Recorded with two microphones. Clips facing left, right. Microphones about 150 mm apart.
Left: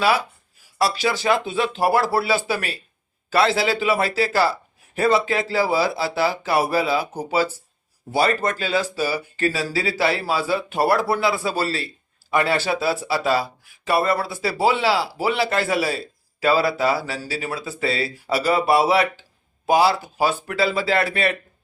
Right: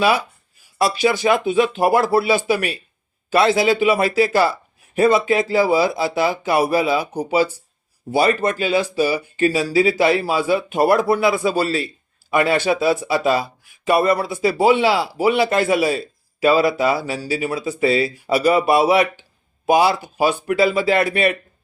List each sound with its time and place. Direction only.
0.8 s speech: 15° right (ahead or behind)